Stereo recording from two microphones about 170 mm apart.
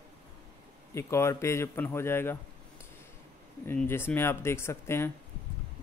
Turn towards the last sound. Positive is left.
turn(degrees=15)  # may be behind; listen again after turning